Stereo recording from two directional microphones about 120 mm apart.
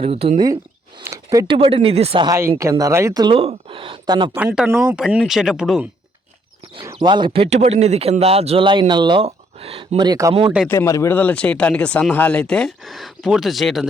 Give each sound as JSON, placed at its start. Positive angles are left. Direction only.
{"t": 0.0, "sound": "speech", "side_deg": -55}
{"t": 0.4, "sound": "a sound", "side_deg": -35}
{"t": 1.5, "sound": "speech", "side_deg": -50}
{"t": 2.2, "sound": "speech", "side_deg": -25}
{"t": 3.3, "sound": "speech", "side_deg": -50}
{"t": 4.7, "sound": "speech", "side_deg": -20}
{"t": 4.9, "sound": "speech", "side_deg": -5}
{"t": 7.0, "sound": "speech", "side_deg": -40}
{"t": 7.3, "sound": "speech", "side_deg": -60}
{"t": 9.2, "sound": "speech", "side_deg": -55}
{"t": 10.0, "sound": "speech", "side_deg": -30}
{"t": 10.7, "sound": "speech", "side_deg": 25}